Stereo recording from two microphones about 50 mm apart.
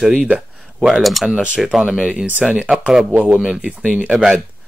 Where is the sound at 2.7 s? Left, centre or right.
Centre.